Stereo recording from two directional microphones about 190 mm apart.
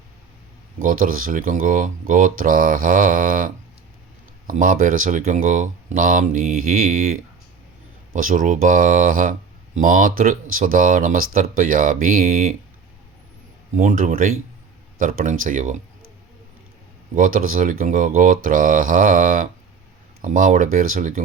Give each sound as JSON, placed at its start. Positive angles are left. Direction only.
{"t": 0.8, "sound": "speech", "side_deg": -45}
{"t": 8.1, "sound": "speech", "side_deg": -45}
{"t": 13.7, "sound": "speech", "side_deg": -45}
{"t": 17.2, "sound": "speech", "side_deg": -45}